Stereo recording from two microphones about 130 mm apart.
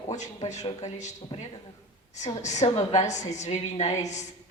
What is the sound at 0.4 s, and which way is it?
Speech, 55° left (ahead or behind).